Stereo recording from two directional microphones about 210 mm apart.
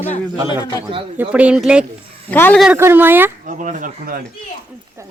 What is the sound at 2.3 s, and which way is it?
Speech, 10° left (ahead or behind).